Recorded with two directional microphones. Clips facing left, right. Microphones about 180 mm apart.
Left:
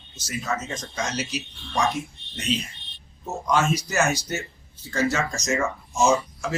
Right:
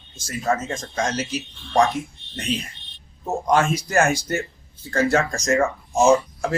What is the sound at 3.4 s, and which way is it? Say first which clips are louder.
Speech: right 2 dB; 55° right (ahead or behind).